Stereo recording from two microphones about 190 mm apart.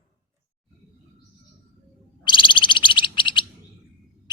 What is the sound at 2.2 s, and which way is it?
Bird, 25° left (ahead or behind).